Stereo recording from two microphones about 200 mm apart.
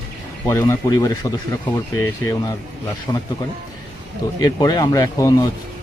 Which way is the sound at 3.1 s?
20° left (ahead or behind).